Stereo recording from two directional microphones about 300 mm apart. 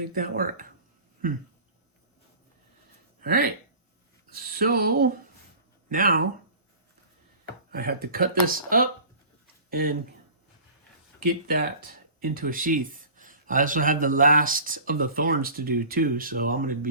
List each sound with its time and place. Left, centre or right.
0.1 s speech: right
3.2 s speech: right
7.7 s speech: right
11.2 s speech: right